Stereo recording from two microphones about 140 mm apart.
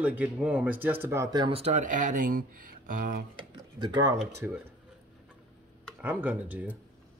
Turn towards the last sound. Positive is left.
turn(degrees=-10)  # may be behind; listen again after turning